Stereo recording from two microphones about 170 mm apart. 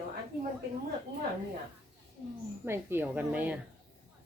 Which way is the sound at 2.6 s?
15° right (ahead or behind).